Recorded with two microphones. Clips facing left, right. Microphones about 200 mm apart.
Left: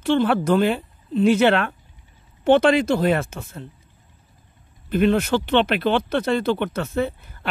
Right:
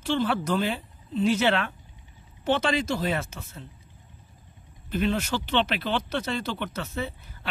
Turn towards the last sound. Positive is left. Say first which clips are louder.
# left 9 dB
turn(degrees=55)  # may be behind; listen again after turning